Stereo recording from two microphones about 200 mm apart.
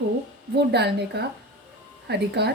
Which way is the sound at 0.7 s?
55° right (ahead or behind).